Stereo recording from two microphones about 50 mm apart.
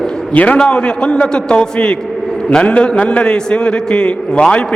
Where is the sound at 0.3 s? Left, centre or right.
Left.